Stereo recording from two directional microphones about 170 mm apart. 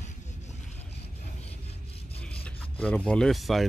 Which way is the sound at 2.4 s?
10° left (ahead or behind).